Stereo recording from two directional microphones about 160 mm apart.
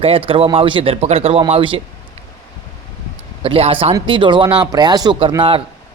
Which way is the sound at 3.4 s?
35° right (ahead or behind).